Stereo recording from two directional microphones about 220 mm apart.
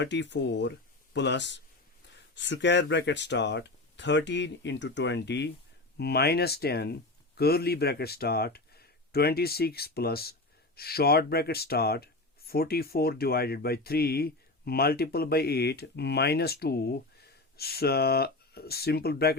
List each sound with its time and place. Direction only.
0.0 s speech: 55° left (ahead or behind)